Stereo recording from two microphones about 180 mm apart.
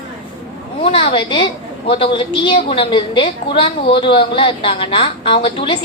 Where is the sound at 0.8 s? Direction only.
30° left (ahead or behind).